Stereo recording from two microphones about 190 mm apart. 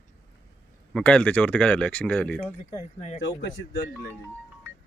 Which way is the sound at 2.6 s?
40° left (ahead or behind).